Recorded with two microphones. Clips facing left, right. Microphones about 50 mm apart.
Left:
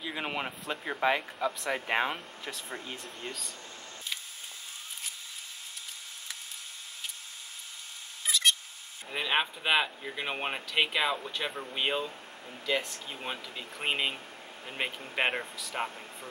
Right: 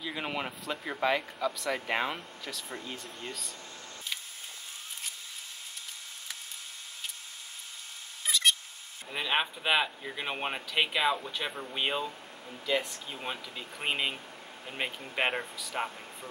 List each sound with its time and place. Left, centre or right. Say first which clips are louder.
0.0 s speech: even; centre
2.4 s speech: even; left
8.3 s a sound: even; centre
9.1 s speech: left 1 dB; centre